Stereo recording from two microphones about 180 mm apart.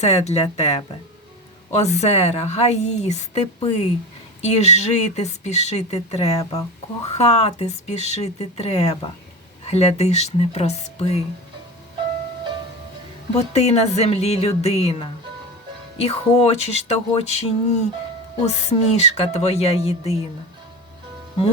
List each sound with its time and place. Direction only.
0.0 s a woman's voice: 35° left (ahead or behind)
6.4 s speech: 20° left (ahead or behind)
7.1 s a woman's voice: 35° left (ahead or behind)
13.3 s a woman's voice: 35° left (ahead or behind)